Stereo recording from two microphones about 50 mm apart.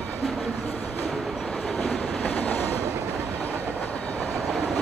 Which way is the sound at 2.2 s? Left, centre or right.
Left.